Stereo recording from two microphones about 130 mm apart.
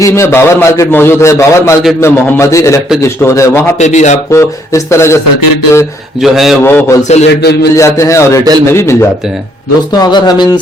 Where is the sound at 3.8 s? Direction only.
65° left (ahead or behind).